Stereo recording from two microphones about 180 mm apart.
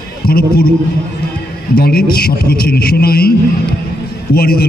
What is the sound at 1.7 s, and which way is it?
Speech, 60° left (ahead or behind).